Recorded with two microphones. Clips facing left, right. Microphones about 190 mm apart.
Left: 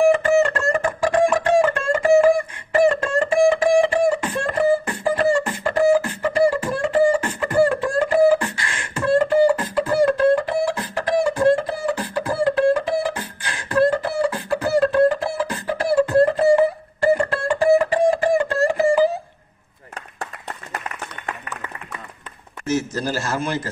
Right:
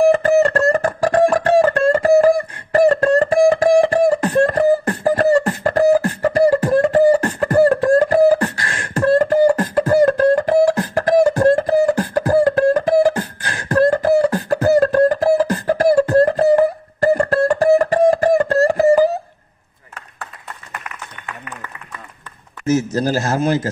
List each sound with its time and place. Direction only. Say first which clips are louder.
0.0 s music: right 3 dB; 35° right (ahead or behind)
8.6 s beatboxing: right 8 dB; 40° right (ahead or behind)
19.9 s a sound: left 3 dB; 35° left (ahead or behind)
22.9 s a man's voice: right 6 dB; 40° right (ahead or behind)